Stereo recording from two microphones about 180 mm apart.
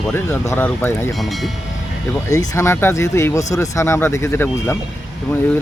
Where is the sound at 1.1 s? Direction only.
Centre (ahead or behind).